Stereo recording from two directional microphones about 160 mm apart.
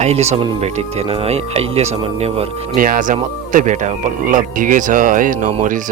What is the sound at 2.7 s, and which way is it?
A man's voice, 60° right (ahead or behind).